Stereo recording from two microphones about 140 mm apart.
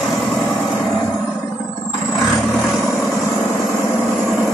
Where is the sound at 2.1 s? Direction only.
Centre (ahead or behind).